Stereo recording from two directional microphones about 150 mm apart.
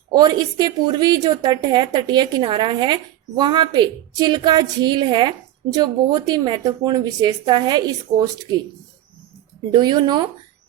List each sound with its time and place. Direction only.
0.1 s a woman's voice: 25° right (ahead or behind)
9.7 s a woman's voice: 30° right (ahead or behind)